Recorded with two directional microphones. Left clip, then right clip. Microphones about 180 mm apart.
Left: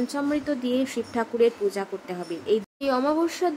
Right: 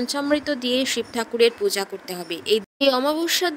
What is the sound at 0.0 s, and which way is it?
Speech, 45° right (ahead or behind).